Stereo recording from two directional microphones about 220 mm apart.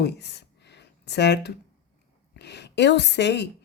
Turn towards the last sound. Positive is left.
turn(degrees=50)  # may be behind; listen again after turning